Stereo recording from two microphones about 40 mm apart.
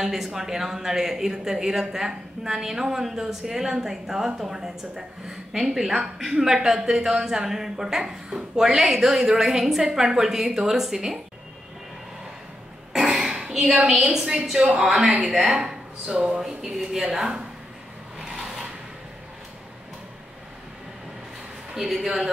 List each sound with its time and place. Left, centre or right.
0.0 s speech: centre
13.0 s a sound: centre
14.1 s speech: centre
16.3 s speech: centre
21.8 s speech: centre